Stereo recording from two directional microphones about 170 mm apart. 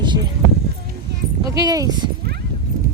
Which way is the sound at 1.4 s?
20° right (ahead or behind).